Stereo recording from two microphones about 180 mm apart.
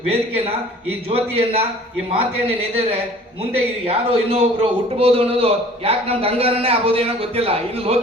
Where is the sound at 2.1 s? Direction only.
30° right (ahead or behind).